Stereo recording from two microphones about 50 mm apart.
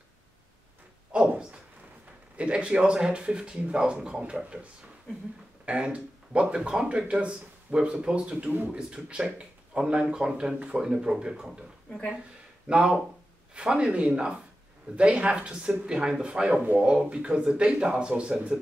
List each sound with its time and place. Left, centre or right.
1.1 s a sound: centre
2.3 s speech: right
5.7 s speech: right
12.6 s speech: centre